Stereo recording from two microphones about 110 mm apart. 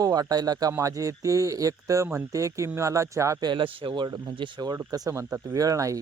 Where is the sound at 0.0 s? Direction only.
35° right (ahead or behind).